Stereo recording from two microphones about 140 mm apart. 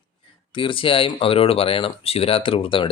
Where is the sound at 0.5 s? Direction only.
40° left (ahead or behind).